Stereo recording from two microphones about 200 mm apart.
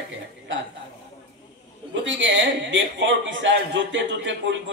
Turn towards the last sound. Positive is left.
turn(degrees=-65)  # may be behind; listen again after turning